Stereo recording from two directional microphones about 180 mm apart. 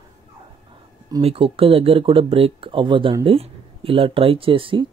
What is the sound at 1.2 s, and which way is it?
Speech, 30° right (ahead or behind).